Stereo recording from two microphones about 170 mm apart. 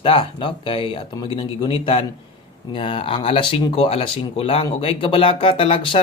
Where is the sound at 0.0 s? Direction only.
30° left (ahead or behind).